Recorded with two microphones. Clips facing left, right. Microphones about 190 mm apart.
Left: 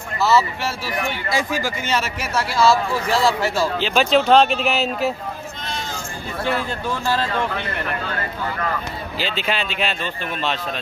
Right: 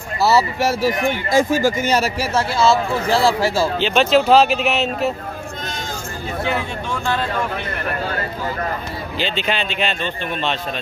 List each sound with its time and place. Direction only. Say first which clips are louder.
0.2 s a man's voice: right 2 dB; 35° right (ahead or behind)
3.8 s speech: right 2 dB; centre (ahead or behind)
9.2 s speech: right 2 dB; 5° left (ahead or behind)